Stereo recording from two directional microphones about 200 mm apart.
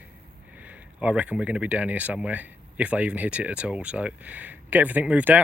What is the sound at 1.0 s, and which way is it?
Speech, 5° right (ahead or behind).